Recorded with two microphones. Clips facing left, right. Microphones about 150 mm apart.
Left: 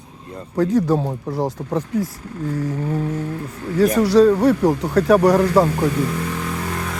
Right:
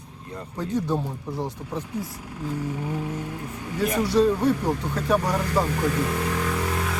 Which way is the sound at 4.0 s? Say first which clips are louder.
Left 6 dB; 90° left.